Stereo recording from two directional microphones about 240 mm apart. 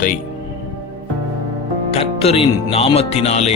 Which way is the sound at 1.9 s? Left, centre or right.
Left.